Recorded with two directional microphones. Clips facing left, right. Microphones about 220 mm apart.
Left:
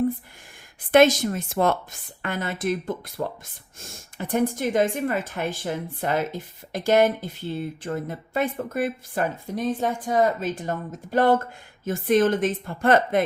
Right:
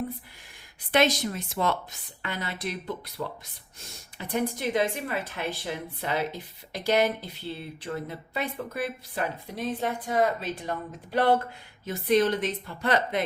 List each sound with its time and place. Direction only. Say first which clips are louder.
0.9 s a woman's voice: left 7 dB; 50° left (ahead or behind)